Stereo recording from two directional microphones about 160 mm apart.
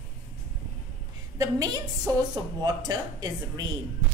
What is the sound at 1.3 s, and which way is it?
Speech, 20° right (ahead or behind).